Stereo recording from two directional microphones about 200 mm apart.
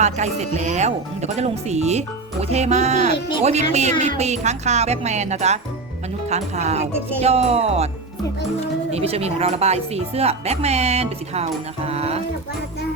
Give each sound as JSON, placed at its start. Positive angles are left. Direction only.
{"t": 0.0, "sound": "speech", "side_deg": -35}
{"t": 8.9, "sound": "speech", "side_deg": -30}